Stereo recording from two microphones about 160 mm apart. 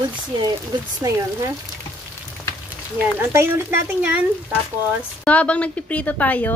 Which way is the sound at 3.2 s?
15° right (ahead or behind).